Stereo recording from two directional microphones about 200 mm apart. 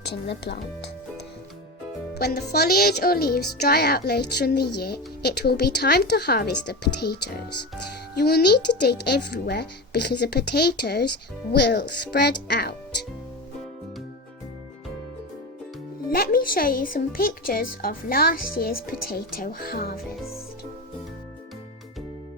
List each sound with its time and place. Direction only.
0.1 s speech: 55° left (ahead or behind)
2.1 s speech: 50° left (ahead or behind)
16.0 s speech: 50° left (ahead or behind)